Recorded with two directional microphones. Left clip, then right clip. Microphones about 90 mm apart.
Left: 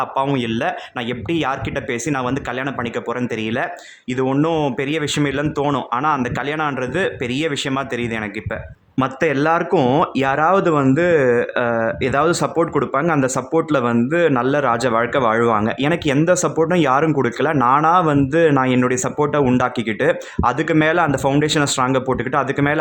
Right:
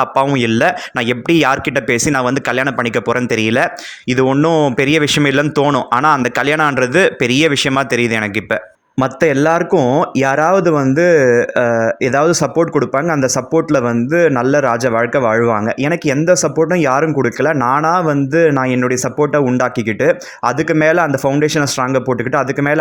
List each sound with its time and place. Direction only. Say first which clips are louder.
0.3 s speech: right 8 dB; 35° right (ahead or behind)
9.7 s speech: right 3 dB; 5° left (ahead or behind)
10.0 s speech: right 3 dB; 30° right (ahead or behind)